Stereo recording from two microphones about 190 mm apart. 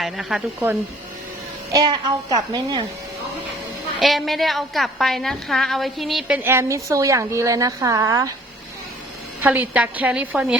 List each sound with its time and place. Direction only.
0.0 s a woman's voice: centre (ahead or behind)
1.7 s a woman's voice: 20° right (ahead or behind)
4.0 s a woman's voice: centre (ahead or behind); by 8.3 s 20° right (ahead or behind)
9.4 s a woman's voice: 10° right (ahead or behind)